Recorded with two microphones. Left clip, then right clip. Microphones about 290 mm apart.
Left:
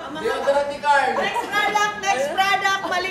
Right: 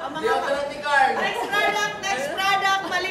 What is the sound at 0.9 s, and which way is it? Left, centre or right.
Speech, centre.